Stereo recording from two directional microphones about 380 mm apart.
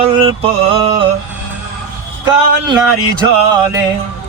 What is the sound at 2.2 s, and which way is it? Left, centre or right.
Music, centre.